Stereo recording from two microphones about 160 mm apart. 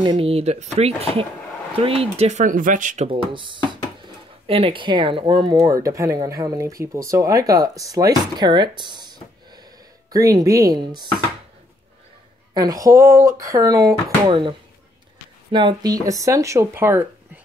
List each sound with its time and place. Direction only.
0.0 s speech: 35° right (ahead or behind); by 3.1 s 55° right (ahead or behind)
3.1 s speech: 30° right (ahead or behind)
10.1 s speech: 20° right (ahead or behind)
12.5 s speech: 25° right (ahead or behind)
15.5 s speech: 25° right (ahead or behind)